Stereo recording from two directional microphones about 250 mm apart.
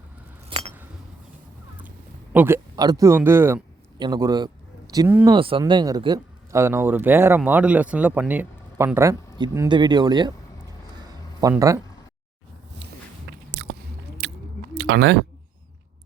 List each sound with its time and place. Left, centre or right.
0.5 s chink: centre
2.3 s speech: centre
10.9 s a sound: centre
11.5 s speech: centre
13.3 s biting: right
14.8 s speech: right